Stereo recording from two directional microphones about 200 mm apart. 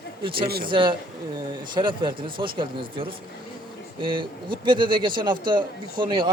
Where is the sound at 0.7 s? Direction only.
25° right (ahead or behind).